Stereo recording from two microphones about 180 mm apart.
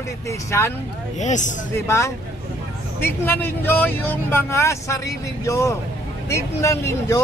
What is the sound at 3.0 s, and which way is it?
Speech, 10° left (ahead or behind).